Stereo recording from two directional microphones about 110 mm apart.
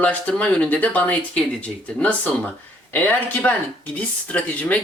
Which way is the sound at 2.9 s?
15° left (ahead or behind).